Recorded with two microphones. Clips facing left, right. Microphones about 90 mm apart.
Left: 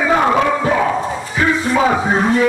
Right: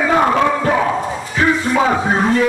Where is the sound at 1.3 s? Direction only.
5° left (ahead or behind).